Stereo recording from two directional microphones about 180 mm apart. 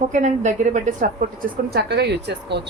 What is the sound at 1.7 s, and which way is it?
Speech, 65° right (ahead or behind).